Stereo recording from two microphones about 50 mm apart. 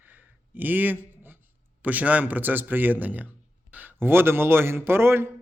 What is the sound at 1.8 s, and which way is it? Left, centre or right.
A man's voice, right.